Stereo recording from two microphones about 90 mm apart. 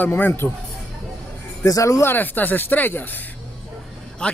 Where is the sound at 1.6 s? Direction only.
40° left (ahead or behind).